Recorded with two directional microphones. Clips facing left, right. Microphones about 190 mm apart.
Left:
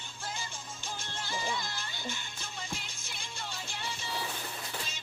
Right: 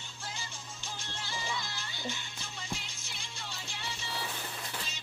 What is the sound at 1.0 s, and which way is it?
Music, 50° left (ahead or behind).